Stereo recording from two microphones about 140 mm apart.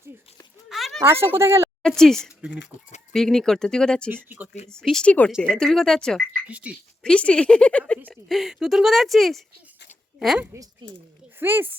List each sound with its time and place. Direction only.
0.7 s a sound: centre (ahead or behind)
1.0 s speech: 15° right (ahead or behind)
1.8 s speech: 5° left (ahead or behind)
4.1 s speech: 15° right (ahead or behind)
4.7 s speech: 5° left (ahead or behind)
6.5 s speech: 10° right (ahead or behind)
7.0 s speech: 5° left (ahead or behind)
10.5 s speech: 20° right (ahead or behind)